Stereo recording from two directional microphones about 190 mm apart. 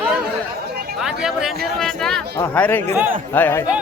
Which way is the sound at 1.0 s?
5° right (ahead or behind).